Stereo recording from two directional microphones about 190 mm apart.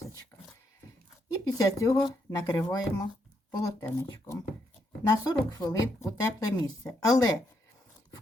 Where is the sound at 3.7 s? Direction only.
15° left (ahead or behind).